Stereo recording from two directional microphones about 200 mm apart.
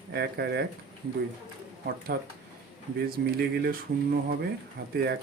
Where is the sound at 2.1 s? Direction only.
55° right (ahead or behind).